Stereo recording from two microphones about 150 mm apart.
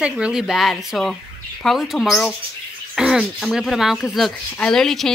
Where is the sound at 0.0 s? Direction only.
5° right (ahead or behind).